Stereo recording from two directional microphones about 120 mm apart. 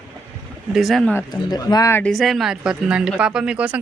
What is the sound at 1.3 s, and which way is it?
Speech, 35° left (ahead or behind).